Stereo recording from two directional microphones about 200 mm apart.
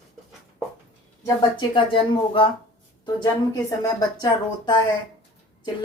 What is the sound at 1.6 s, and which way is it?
Speech, 25° left (ahead or behind).